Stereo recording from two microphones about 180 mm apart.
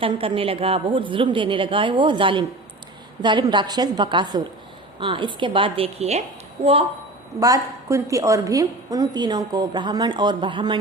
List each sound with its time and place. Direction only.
0.0 s a woman's voice: 30° right (ahead or behind)
7.3 s a woman's voice: 20° right (ahead or behind)